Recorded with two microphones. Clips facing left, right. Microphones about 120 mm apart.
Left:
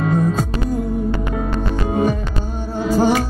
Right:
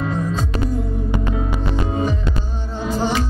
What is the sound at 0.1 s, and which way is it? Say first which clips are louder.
Music: left 5 dB; 50° left (ahead or behind).